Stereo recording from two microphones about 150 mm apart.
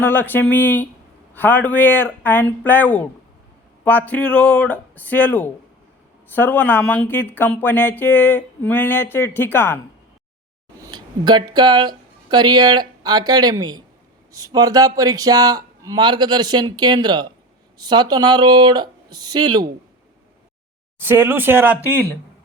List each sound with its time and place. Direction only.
0.0 s speech: 10° left (ahead or behind)
10.8 s speech: 30° right (ahead or behind)
21.0 s speech: 15° right (ahead or behind)